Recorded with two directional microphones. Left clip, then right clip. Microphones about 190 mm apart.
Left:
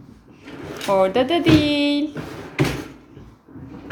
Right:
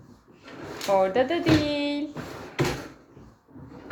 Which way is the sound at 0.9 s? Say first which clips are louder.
Left 5 dB; 15° left (ahead or behind).